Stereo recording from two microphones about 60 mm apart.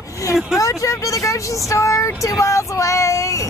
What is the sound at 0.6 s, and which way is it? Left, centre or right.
Speech, left.